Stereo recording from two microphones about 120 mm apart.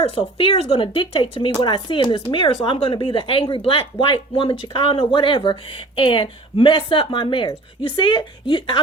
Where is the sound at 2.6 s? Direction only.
50° left (ahead or behind).